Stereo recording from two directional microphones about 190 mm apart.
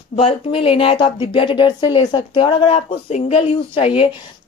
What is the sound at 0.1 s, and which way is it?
Speech, 30° left (ahead or behind).